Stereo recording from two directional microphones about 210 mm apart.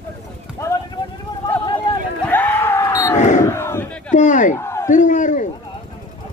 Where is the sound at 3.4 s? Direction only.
10° left (ahead or behind).